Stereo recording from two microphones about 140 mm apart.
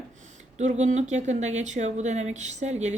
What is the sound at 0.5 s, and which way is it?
Speech, 55° right (ahead or behind).